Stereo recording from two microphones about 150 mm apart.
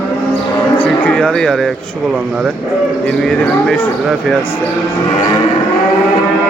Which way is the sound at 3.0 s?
5° left (ahead or behind).